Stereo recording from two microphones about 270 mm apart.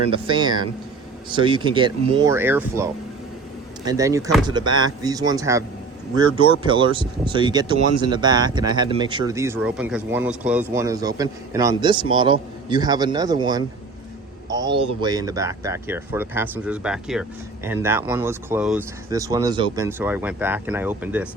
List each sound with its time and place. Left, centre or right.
0.1 s speech: centre